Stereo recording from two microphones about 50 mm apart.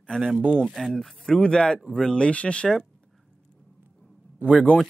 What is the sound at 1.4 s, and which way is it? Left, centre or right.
Speech, centre.